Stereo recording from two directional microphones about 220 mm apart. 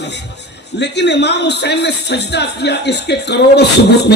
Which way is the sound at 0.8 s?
50° left (ahead or behind).